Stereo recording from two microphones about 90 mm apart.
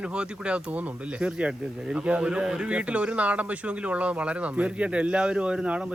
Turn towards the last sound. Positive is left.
turn(degrees=-10)  # may be behind; listen again after turning